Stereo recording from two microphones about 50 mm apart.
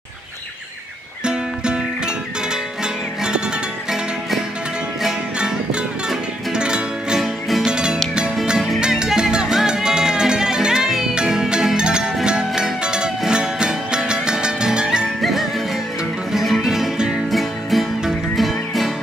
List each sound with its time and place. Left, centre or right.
1.2 s music: centre
5.4 s music: centre
7.2 s music: centre
7.6 s music: centre
16.3 s music: centre